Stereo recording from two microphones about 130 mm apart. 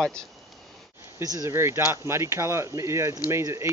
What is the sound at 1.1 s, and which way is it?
Speech, 25° right (ahead or behind).